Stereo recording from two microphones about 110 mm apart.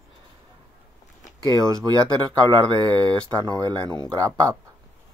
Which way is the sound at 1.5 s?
30° right (ahead or behind).